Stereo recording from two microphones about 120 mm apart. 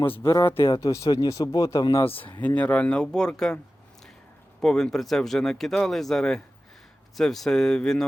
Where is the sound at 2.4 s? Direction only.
10° left (ahead or behind).